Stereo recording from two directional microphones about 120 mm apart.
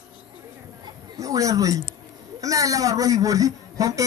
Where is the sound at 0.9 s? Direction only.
30° right (ahead or behind).